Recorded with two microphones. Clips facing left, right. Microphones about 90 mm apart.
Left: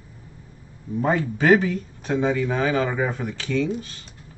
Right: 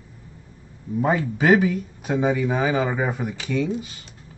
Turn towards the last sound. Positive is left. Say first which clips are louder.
# even
turn(degrees=-10)  # may be behind; listen again after turning